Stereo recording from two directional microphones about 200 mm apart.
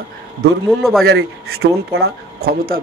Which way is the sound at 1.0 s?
90° right.